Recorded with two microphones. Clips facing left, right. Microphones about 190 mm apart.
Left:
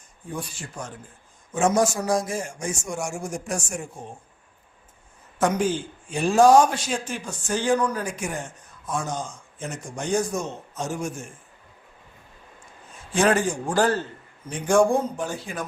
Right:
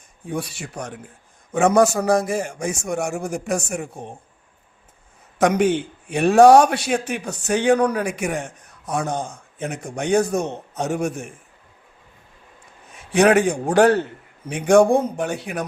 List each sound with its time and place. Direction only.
0.3 s a man's voice: 75° right (ahead or behind)
5.4 s a man's voice: 70° right (ahead or behind)
13.0 s a man's voice: 70° right (ahead or behind)